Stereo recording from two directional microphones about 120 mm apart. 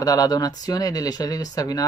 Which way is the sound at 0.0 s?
30° left (ahead or behind).